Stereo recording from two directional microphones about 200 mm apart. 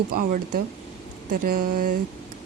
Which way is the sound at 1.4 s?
45° right (ahead or behind).